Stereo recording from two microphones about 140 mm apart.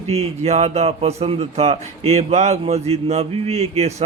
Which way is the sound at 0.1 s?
50° right (ahead or behind).